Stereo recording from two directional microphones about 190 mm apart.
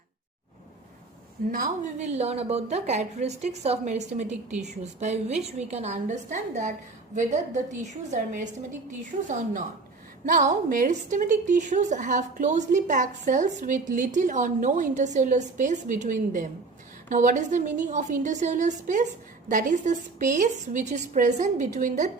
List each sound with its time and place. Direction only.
1.5 s a woman's voice: 40° right (ahead or behind)
10.7 s a woman's voice: 45° right (ahead or behind)